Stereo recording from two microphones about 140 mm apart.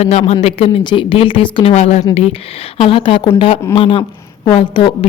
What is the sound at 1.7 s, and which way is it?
A woman's voice, 55° left (ahead or behind).